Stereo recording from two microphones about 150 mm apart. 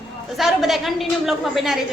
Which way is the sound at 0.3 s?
Centre (ahead or behind).